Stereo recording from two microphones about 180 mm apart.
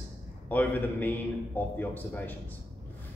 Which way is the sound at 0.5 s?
10° left (ahead or behind).